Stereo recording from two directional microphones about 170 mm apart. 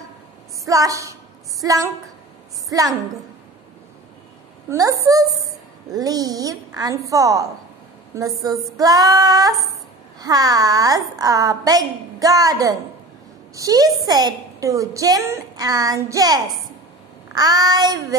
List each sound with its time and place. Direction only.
0.7 s a woman's voice: 20° right (ahead or behind)
4.6 s a woman's voice: 20° right (ahead or behind)